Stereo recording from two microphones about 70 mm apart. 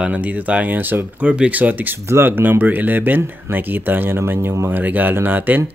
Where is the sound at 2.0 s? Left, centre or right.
Right.